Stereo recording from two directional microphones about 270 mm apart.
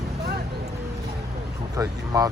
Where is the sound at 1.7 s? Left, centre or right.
Centre.